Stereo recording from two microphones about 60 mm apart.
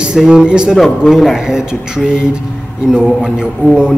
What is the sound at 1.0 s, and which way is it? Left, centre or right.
A man's voice, centre.